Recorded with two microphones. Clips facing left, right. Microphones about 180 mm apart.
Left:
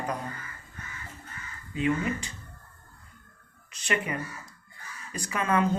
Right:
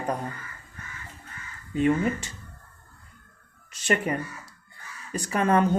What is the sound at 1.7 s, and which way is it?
Speech, 45° right (ahead or behind).